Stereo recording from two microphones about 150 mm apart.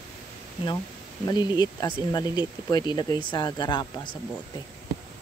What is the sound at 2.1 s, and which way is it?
Speech, 30° left (ahead or behind).